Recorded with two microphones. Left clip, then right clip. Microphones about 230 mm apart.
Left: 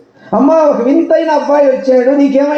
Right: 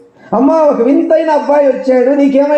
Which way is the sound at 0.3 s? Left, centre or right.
Right.